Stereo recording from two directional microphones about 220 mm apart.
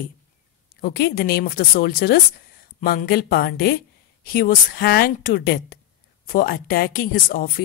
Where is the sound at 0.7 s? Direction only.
45° left (ahead or behind).